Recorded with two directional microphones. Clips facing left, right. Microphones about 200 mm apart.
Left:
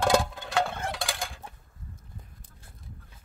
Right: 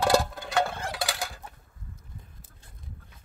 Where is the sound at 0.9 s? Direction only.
5° right (ahead or behind).